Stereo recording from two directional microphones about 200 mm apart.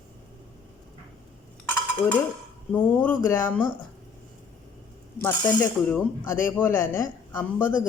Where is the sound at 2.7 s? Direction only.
5° left (ahead or behind).